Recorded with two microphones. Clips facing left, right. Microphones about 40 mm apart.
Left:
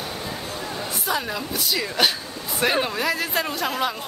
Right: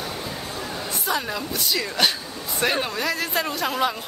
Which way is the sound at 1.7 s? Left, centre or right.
Centre.